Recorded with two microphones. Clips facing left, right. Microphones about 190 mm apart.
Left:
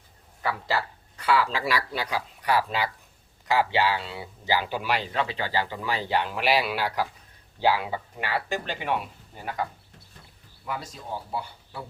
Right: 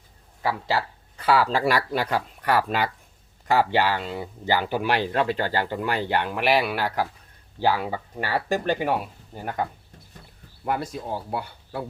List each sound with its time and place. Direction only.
0.4 s speech: 25° right (ahead or behind)
1.2 s speech: 40° right (ahead or behind)
10.7 s speech: 60° right (ahead or behind)